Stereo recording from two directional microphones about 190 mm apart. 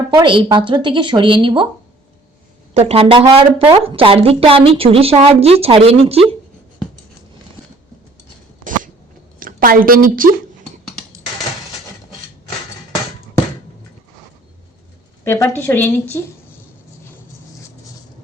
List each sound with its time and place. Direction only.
0.1 s speech: 25° right (ahead or behind)
2.7 s a woman's voice: 30° right (ahead or behind)
9.4 s a woman's voice: 50° right (ahead or behind)
15.2 s a woman's voice: 15° left (ahead or behind)